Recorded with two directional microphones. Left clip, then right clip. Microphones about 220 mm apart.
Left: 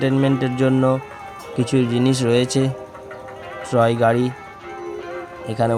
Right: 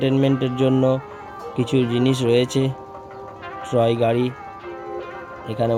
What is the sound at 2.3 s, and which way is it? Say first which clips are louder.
Speech: even; 60° left (ahead or behind).